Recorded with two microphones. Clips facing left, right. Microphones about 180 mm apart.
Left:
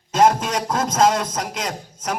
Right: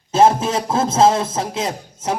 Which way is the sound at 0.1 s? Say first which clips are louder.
Right 3 dB; 30° right (ahead or behind).